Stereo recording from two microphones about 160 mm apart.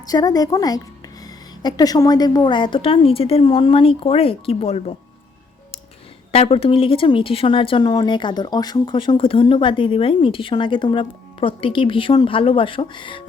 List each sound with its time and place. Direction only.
0.1 s a woman's voice: 25° left (ahead or behind)
6.3 s speech: 35° left (ahead or behind)